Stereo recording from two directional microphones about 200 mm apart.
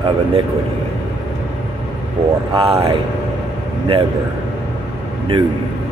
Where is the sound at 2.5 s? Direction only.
25° right (ahead or behind).